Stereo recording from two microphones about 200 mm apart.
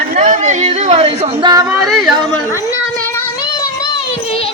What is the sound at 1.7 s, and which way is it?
Speech, centre (ahead or behind).